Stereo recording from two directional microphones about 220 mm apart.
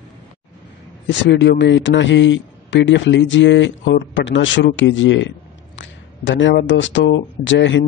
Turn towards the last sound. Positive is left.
turn(degrees=55)  # may be behind; listen again after turning